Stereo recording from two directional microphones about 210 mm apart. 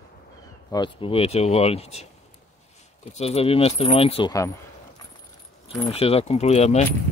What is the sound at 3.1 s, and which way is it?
Speech, 30° left (ahead or behind).